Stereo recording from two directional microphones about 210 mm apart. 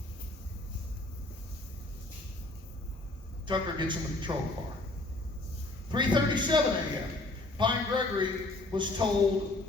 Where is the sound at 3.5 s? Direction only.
20° right (ahead or behind).